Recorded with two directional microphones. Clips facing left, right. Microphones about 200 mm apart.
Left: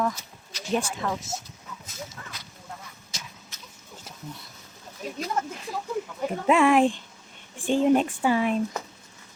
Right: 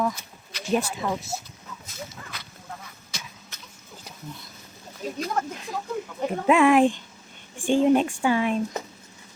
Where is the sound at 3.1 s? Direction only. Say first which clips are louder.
Right 3 dB; 60° right (ahead or behind).